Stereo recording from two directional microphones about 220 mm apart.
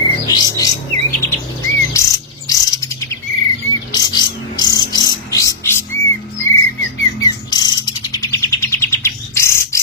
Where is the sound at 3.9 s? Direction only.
20° left (ahead or behind).